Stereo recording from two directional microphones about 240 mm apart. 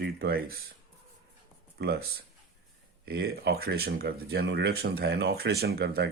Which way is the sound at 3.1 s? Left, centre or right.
Right.